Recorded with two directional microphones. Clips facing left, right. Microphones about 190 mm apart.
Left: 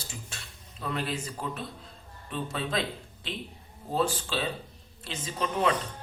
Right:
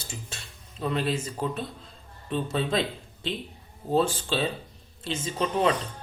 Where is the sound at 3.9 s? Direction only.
25° right (ahead or behind).